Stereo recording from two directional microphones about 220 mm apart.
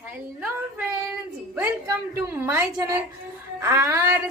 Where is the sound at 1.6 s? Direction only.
15° right (ahead or behind).